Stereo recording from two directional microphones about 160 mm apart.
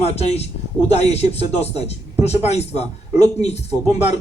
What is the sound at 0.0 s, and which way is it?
A man's voice, 40° left (ahead or behind).